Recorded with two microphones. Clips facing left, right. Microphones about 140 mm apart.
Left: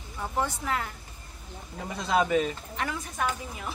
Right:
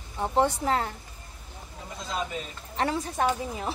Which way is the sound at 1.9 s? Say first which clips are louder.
Left 8 dB; 70° left (ahead or behind).